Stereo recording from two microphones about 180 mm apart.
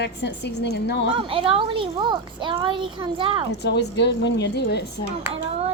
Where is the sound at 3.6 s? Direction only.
70° left (ahead or behind).